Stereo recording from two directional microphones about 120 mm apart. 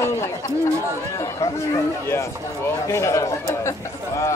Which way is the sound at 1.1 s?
30° left (ahead or behind).